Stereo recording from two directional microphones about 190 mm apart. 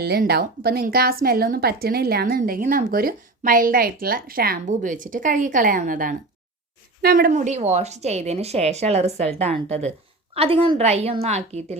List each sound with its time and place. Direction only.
0.0 s a woman's voice: 55° right (ahead or behind); by 11.8 s 35° right (ahead or behind)